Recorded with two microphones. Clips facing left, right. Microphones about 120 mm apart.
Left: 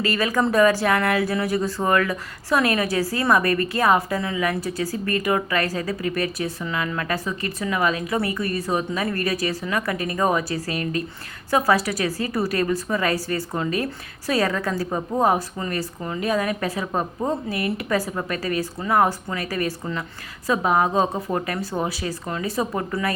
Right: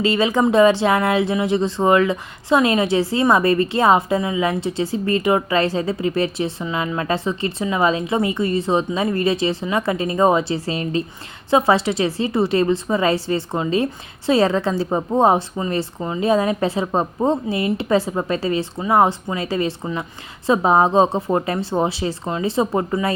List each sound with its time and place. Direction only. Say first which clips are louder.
0.0 s speech: right 5 dB; 25° right (ahead or behind)